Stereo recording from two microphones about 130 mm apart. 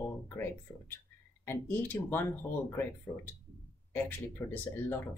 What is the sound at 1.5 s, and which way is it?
Speech, 15° left (ahead or behind).